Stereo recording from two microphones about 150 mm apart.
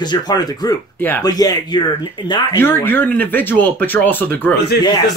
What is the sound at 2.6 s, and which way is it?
Speech, 15° left (ahead or behind).